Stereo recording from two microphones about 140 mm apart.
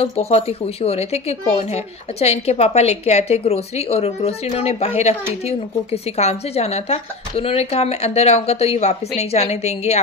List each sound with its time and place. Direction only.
0.0 s a woman's voice: 50° left (ahead or behind)